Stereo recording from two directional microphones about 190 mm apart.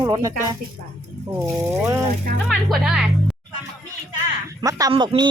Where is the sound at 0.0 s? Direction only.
15° right (ahead or behind).